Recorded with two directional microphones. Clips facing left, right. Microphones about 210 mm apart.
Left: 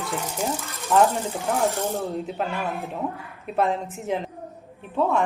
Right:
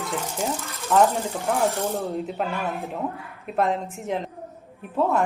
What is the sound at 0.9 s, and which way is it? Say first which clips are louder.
A woman's voice: even; 5° left (ahead or behind).